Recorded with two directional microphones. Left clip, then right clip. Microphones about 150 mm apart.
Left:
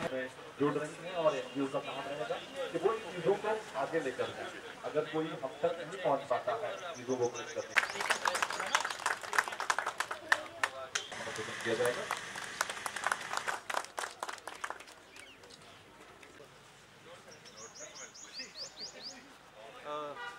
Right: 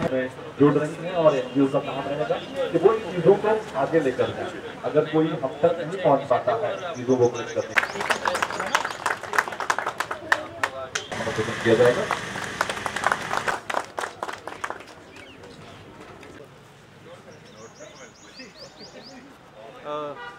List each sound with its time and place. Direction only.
0.0 s a man's voice: 15° right (ahead or behind)
7.3 s a sound: 10° right (ahead or behind)
19.8 s vehicle: 15° right (ahead or behind)